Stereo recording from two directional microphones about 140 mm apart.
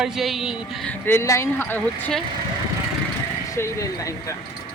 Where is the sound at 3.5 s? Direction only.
20° left (ahead or behind).